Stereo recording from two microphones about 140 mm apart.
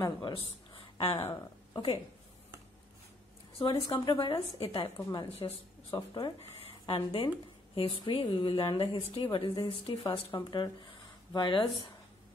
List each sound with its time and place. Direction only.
0.0 s a woman's voice: 30° left (ahead or behind)
1.3 s speech: 30° left (ahead or behind)
3.5 s a woman's voice: 35° left (ahead or behind)
6.9 s a woman's voice: 45° left (ahead or behind)